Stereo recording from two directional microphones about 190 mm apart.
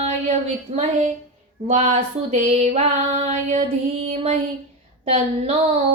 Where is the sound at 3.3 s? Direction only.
35° right (ahead or behind).